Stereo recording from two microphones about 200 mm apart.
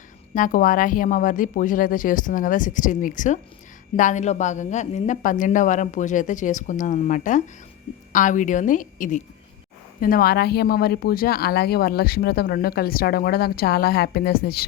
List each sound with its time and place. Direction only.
0.3 s a woman's voice: 40° left (ahead or behind)